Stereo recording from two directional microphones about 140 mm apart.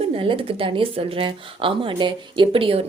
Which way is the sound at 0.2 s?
40° right (ahead or behind).